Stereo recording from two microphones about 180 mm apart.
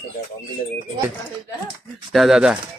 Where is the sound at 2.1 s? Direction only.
Centre (ahead or behind).